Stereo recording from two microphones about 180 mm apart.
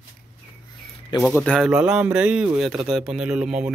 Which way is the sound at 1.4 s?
Centre (ahead or behind).